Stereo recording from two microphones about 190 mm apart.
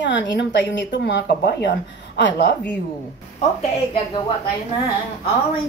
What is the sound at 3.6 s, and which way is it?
Speech, 30° left (ahead or behind).